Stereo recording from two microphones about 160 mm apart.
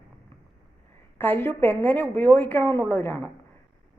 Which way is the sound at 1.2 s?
15° left (ahead or behind).